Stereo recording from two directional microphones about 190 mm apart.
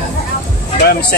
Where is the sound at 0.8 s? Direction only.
55° left (ahead or behind).